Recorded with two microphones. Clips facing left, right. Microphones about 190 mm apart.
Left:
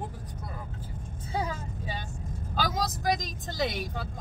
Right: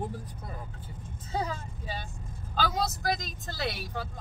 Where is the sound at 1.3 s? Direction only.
10° left (ahead or behind).